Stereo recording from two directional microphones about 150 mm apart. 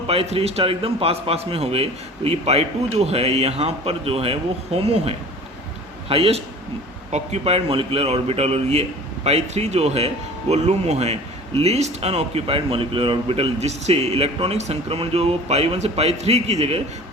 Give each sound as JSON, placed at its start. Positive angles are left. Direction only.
{"t": 0.1, "sound": "a man's voice", "side_deg": -40}